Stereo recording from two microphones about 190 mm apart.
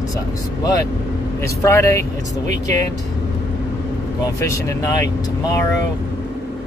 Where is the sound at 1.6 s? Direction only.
15° left (ahead or behind).